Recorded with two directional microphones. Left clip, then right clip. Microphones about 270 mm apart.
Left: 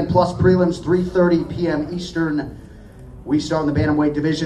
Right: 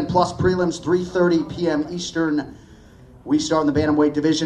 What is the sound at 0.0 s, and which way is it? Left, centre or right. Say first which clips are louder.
A man's voice: left 2 dB; right.